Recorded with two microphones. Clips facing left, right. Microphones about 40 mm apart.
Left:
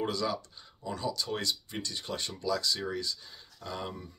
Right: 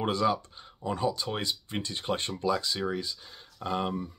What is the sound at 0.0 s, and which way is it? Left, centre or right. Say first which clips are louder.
Speech: right 5 dB; right.